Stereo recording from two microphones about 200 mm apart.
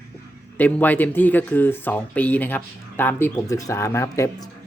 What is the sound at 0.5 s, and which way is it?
Speech, 10° left (ahead or behind).